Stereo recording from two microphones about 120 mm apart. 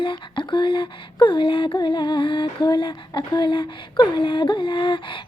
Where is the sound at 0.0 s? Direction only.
45° left (ahead or behind).